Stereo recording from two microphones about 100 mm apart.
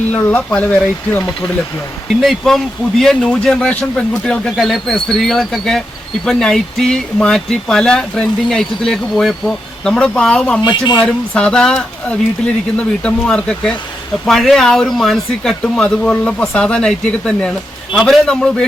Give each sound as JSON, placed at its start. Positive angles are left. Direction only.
{"t": 0.1, "sound": "speech", "side_deg": 15}
{"t": 2.2, "sound": "speech", "side_deg": 0}